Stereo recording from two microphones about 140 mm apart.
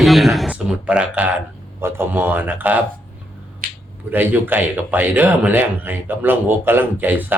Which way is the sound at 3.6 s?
75° right (ahead or behind).